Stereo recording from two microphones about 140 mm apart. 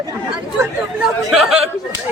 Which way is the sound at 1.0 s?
5° right (ahead or behind).